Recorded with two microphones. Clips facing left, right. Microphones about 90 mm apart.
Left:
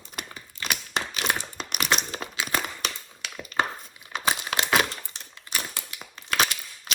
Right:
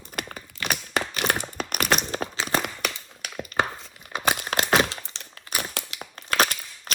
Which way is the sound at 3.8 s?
55° right (ahead or behind).